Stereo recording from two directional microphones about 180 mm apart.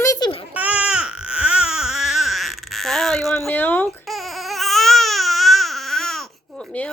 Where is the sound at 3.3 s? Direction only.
10° left (ahead or behind).